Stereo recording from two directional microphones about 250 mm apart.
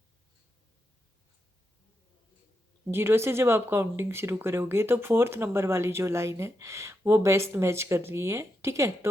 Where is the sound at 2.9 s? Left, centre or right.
Centre.